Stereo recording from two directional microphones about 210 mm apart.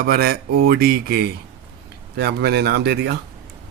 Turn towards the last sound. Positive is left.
turn(degrees=-50)  # may be behind; listen again after turning